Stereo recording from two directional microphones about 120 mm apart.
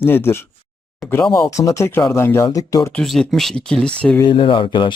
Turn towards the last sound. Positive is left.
turn(degrees=45)  # may be behind; listen again after turning